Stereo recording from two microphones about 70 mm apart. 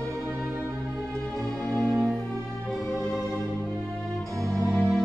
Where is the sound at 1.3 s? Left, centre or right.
Centre.